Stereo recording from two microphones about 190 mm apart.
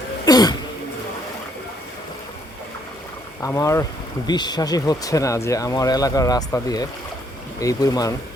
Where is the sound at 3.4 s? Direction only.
15° left (ahead or behind).